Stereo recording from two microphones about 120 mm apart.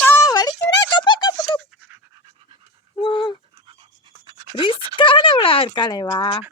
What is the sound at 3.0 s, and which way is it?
Dog, 40° left (ahead or behind).